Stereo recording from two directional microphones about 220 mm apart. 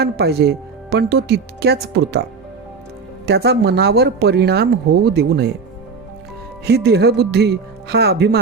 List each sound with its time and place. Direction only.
0.0 s speech: 45° right (ahead or behind)
3.2 s speech: 50° right (ahead or behind)
6.7 s speech: 45° right (ahead or behind)